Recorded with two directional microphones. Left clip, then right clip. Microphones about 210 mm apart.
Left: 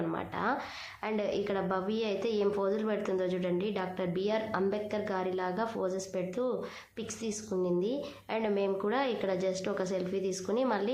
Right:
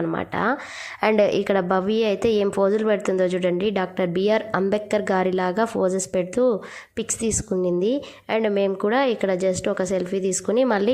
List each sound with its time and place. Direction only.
0.1 s a woman's voice: 35° right (ahead or behind)